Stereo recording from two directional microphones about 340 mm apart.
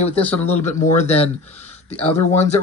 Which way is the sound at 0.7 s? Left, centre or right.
Left.